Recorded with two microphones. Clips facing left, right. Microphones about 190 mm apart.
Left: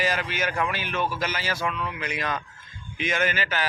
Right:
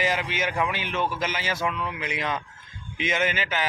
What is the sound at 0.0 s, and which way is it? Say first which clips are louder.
Speech: even; 20° right (ahead or behind).